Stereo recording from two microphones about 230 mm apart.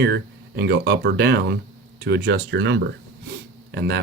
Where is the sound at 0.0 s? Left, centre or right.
Right.